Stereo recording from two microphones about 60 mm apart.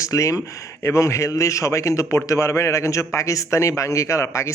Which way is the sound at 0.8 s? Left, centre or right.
Left.